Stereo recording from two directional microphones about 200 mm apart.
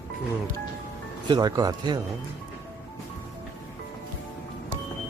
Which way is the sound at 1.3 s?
20° right (ahead or behind).